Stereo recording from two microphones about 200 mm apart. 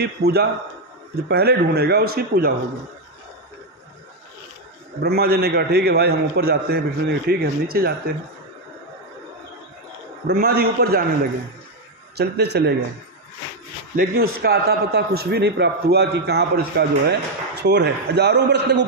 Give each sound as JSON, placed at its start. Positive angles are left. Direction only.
{"t": 0.0, "sound": "a man's voice", "side_deg": -55}
{"t": 5.0, "sound": "a man's voice", "side_deg": -50}
{"t": 10.2, "sound": "a man's voice", "side_deg": -50}
{"t": 12.1, "sound": "a man's voice", "side_deg": -55}
{"t": 13.9, "sound": "a man's voice", "side_deg": -50}